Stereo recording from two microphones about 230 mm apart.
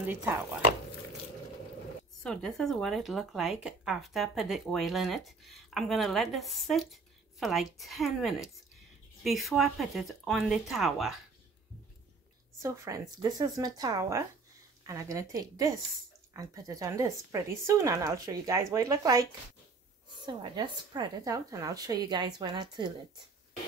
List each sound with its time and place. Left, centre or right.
0.0 s speech: centre
2.2 s speech: centre
12.6 s speech: centre
20.2 s speech: centre